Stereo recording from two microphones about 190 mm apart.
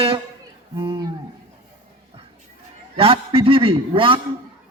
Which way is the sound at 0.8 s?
25° right (ahead or behind).